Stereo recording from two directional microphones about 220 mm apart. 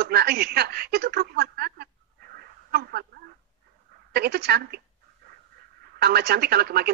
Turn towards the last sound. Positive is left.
turn(degrees=-45)  # may be behind; listen again after turning